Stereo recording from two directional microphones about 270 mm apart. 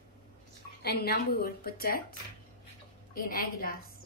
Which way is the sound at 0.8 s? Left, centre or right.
Left.